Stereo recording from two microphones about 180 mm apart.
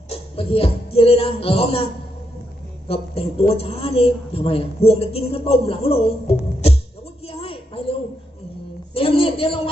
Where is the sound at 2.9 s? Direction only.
35° left (ahead or behind).